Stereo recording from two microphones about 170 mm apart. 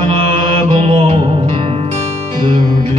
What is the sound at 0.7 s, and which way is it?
Music, 35° right (ahead or behind).